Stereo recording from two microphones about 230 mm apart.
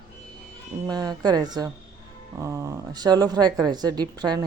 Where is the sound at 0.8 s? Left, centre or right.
Centre.